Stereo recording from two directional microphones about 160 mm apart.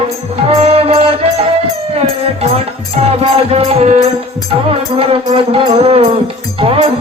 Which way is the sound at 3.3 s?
40° right (ahead or behind).